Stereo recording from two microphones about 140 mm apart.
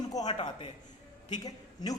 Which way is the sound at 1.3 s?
25° left (ahead or behind).